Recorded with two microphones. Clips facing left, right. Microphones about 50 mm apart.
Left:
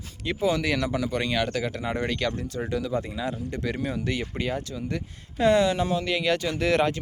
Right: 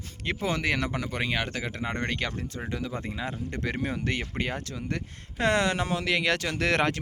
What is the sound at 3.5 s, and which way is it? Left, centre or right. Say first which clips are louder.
Speech: left 2 dB; right.